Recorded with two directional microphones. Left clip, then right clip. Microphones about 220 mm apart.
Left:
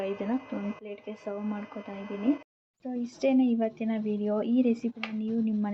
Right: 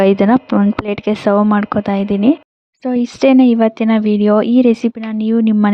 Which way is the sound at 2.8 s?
50° right (ahead or behind).